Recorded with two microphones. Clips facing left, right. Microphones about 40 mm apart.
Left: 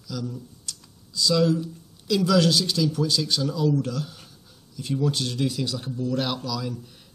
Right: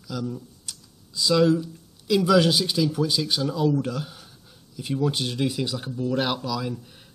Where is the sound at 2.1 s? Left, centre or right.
Centre.